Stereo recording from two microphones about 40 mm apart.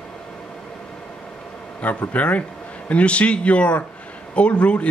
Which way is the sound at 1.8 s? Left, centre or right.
Left.